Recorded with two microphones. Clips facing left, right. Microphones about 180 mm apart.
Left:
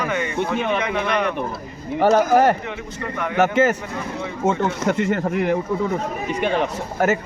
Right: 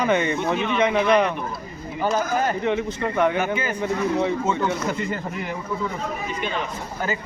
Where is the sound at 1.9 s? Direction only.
70° left (ahead or behind).